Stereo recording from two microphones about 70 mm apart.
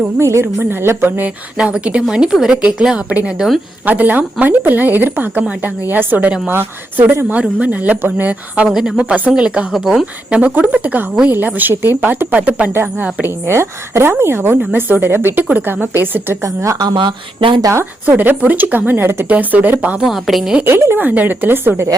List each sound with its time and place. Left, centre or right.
0.2 s a woman's voice: right
1.5 s a woman's voice: centre; by 7.3 s right
7.3 s speech: right
8.7 s speech: centre
9.7 s a woman's voice: centre
10.3 s speech: right
13.2 s a woman's voice: right
16.4 s speech: right
16.8 s speech: right
18.0 s speech: right
20.1 s a woman's voice: centre
20.7 s a woman's voice: right